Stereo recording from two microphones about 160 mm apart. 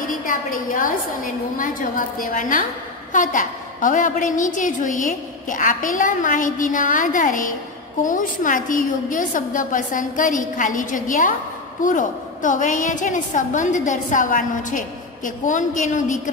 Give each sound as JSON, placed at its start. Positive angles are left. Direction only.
{"t": 0.3, "sound": "a woman's voice", "side_deg": 60}